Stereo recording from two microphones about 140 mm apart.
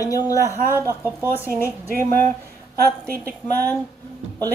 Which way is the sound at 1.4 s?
15° left (ahead or behind).